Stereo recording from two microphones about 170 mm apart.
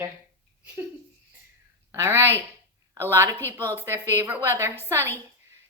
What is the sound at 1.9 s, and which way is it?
A woman's voice, 15° right (ahead or behind).